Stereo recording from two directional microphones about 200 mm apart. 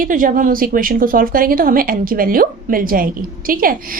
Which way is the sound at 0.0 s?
40° right (ahead or behind).